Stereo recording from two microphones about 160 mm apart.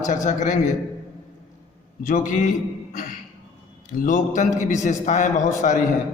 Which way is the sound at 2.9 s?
55° left (ahead or behind).